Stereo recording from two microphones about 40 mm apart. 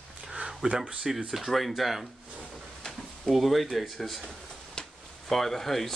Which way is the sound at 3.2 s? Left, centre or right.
Centre.